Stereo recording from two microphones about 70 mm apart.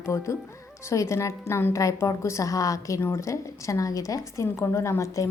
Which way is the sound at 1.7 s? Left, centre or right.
Left.